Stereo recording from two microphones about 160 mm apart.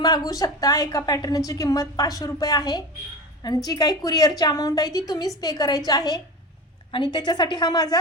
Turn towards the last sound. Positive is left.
turn(degrees=25)  # may be behind; listen again after turning